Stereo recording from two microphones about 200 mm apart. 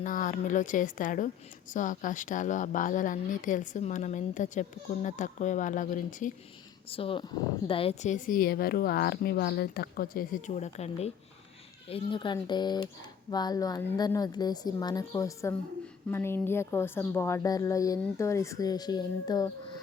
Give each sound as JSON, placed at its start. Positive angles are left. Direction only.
{"t": 0.0, "sound": "a woman's voice", "side_deg": 40}
{"t": 6.9, "sound": "a woman's voice", "side_deg": 25}